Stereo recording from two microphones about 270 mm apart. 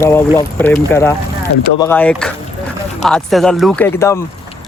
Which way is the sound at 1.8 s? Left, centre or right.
Centre.